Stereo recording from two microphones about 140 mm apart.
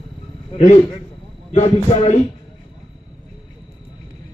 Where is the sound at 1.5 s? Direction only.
50° left (ahead or behind).